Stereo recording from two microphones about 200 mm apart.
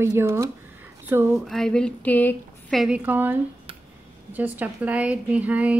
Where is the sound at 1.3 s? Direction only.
Centre (ahead or behind).